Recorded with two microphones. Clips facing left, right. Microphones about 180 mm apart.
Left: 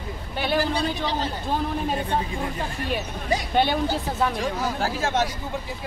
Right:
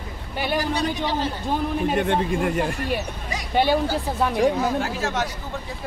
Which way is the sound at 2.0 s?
80° right.